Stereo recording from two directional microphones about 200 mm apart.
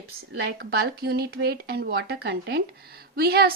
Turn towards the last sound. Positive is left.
turn(degrees=-50)  # may be behind; listen again after turning